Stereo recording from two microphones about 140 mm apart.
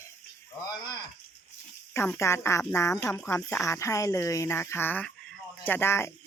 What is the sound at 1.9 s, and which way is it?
Speech, 20° left (ahead or behind).